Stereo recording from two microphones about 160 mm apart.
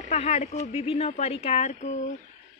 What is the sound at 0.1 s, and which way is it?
Speech, 45° left (ahead or behind).